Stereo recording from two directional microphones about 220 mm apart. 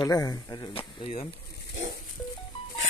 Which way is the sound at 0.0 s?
15° left (ahead or behind).